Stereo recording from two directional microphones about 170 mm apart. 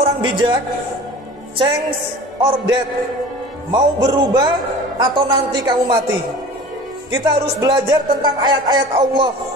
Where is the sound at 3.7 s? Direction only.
25° right (ahead or behind).